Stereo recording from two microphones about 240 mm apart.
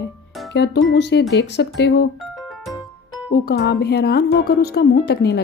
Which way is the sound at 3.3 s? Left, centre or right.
Left.